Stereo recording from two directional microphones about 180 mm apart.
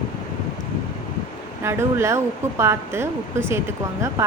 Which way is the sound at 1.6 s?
15° right (ahead or behind).